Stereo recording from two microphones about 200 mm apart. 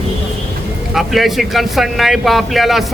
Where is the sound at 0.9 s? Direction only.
Centre (ahead or behind).